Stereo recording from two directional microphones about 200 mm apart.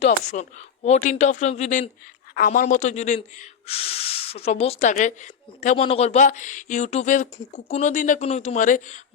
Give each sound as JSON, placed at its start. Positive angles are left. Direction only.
{"t": 0.3, "sound": "speech", "side_deg": 35}
{"t": 2.3, "sound": "speech", "side_deg": 45}